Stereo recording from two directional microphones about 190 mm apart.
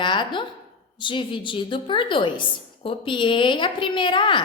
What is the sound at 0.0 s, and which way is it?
A woman's voice, 25° left (ahead or behind).